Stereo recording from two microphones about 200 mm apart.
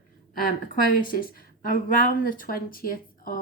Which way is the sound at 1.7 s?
45° left (ahead or behind).